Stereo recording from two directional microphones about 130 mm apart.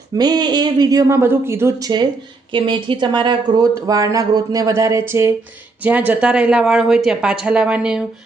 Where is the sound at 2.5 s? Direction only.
40° right (ahead or behind); by 8.0 s 5° right (ahead or behind).